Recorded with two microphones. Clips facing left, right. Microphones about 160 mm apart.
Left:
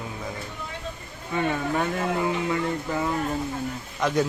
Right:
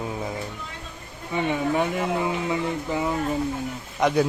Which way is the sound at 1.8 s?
15° right (ahead or behind).